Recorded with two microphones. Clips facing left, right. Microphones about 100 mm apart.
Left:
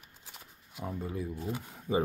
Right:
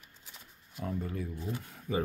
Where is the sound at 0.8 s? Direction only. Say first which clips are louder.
Even; 15° left (ahead or behind).